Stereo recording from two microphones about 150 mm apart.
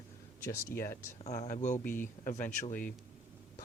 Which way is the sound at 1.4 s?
55° left (ahead or behind).